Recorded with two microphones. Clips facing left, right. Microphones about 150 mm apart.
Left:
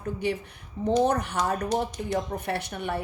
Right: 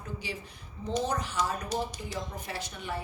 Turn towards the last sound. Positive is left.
turn(degrees=60)  # may be behind; listen again after turning